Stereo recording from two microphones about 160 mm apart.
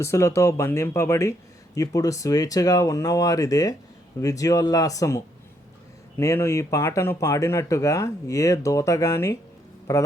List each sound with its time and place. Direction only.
0.0 s speech: 15° left (ahead or behind)